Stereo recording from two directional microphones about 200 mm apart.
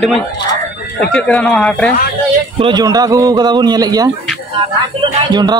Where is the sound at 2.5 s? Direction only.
20° right (ahead or behind).